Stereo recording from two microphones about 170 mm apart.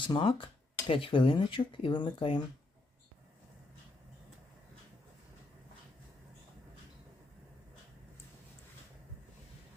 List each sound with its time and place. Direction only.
0.0 s speech: 30° left (ahead or behind)